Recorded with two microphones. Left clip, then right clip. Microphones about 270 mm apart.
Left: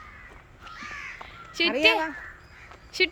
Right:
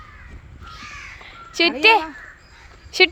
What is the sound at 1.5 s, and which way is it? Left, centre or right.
Speech, centre.